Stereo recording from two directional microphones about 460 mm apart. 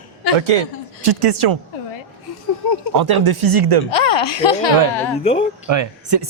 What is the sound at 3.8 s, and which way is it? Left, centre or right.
Speech, left.